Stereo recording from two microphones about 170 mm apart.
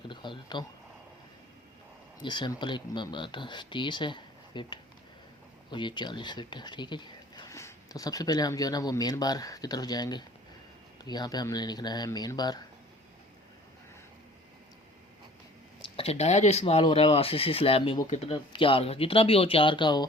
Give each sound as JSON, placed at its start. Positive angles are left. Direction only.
{"t": 0.1, "sound": "speech", "side_deg": 25}
{"t": 2.2, "sound": "speech", "side_deg": 25}
{"t": 15.8, "sound": "speech", "side_deg": 35}